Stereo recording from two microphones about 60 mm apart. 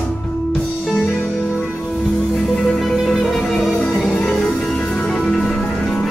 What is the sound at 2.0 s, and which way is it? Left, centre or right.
Music, centre.